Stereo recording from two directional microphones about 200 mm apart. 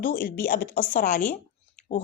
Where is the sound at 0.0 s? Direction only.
45° left (ahead or behind).